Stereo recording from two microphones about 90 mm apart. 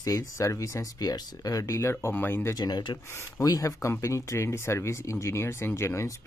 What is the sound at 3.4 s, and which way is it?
Speech, 40° left (ahead or behind).